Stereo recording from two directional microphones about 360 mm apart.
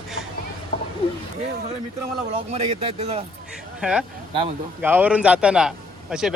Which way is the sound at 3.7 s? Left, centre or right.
Centre.